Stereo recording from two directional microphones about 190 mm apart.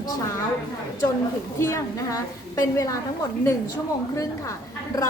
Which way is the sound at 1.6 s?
15° left (ahead or behind).